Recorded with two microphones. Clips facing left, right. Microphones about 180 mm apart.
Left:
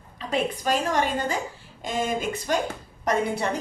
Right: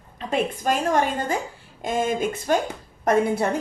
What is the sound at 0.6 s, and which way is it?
A woman's voice, 50° right (ahead or behind).